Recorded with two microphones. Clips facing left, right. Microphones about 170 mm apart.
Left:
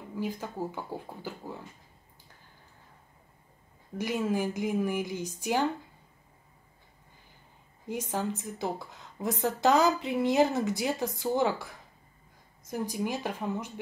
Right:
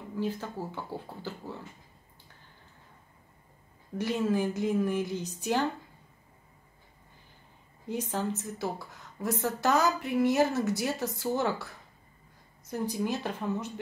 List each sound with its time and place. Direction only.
0.2 s a woman's voice: 15° left (ahead or behind)
4.0 s a woman's voice: 10° left (ahead or behind)
7.9 s a woman's voice: 15° left (ahead or behind)